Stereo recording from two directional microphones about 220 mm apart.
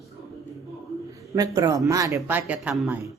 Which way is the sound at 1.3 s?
15° right (ahead or behind).